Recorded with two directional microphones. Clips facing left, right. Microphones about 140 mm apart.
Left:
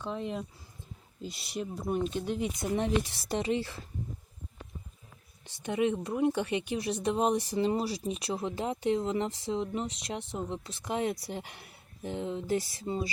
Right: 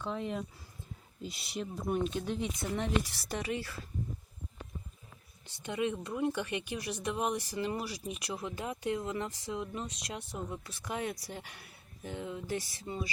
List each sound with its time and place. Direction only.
0.0 s speech: centre (ahead or behind)
2.7 s speech: 20° left (ahead or behind)
5.6 s speech: 20° left (ahead or behind)